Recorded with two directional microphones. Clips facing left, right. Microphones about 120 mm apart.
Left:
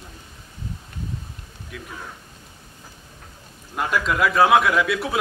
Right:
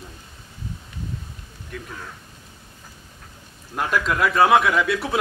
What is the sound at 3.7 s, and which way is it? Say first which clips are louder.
A man's voice: even; centre (ahead or behind).